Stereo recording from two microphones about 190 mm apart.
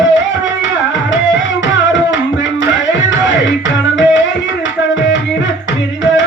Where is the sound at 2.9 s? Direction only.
70° left (ahead or behind).